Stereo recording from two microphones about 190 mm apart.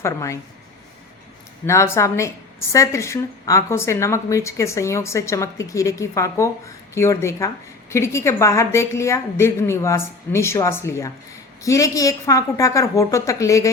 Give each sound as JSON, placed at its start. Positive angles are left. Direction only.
{"t": 0.0, "sound": "a woman's voice", "side_deg": 15}
{"t": 1.6, "sound": "a woman's voice", "side_deg": 15}